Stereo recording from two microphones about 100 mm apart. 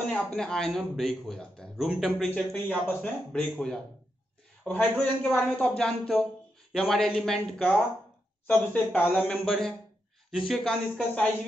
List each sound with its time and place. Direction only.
0.0 s a man's voice: 10° left (ahead or behind)
2.5 s speech: 15° left (ahead or behind)
3.5 s a man's voice: 5° left (ahead or behind)
4.6 s speech: 15° left (ahead or behind)